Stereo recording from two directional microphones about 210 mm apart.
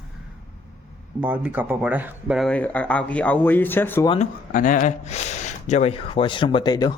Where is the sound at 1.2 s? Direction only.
10° right (ahead or behind); by 4.0 s 10° left (ahead or behind).